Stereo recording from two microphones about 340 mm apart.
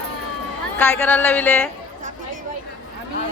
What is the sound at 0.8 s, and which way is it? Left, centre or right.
Speech, centre.